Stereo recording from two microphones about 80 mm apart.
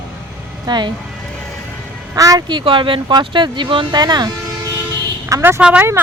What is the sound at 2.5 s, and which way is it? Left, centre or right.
Speech, right.